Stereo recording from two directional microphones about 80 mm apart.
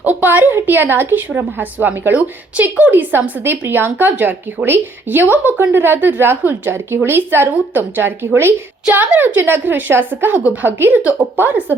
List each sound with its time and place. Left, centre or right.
0.0 s a woman's voice: right